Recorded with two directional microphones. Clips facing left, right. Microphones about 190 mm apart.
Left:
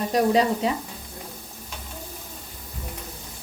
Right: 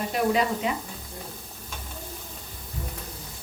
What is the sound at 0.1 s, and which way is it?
Speech, 35° left (ahead or behind).